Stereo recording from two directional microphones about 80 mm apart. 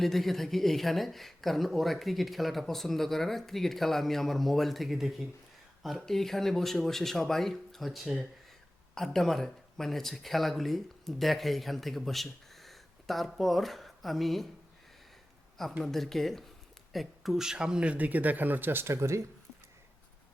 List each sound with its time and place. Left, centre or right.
0.0 s speech: centre
15.8 s speech: centre; by 19.2 s right